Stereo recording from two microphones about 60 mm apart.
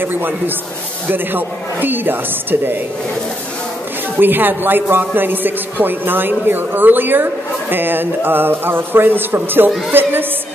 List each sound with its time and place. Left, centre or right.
0.0 s a man's voice: right
4.2 s a man's voice: right